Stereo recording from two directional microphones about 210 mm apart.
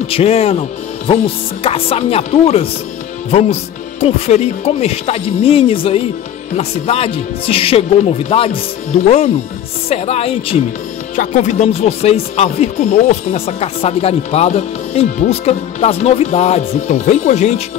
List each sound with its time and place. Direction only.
0.1 s speech: 30° left (ahead or behind)